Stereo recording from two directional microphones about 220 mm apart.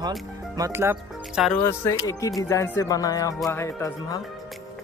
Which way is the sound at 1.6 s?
15° left (ahead or behind).